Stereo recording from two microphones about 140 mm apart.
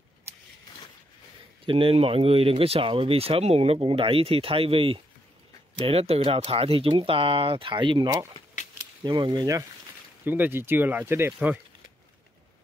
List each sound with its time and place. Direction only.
1.7 s speech: 40° right (ahead or behind)
10.2 s speech: 15° right (ahead or behind)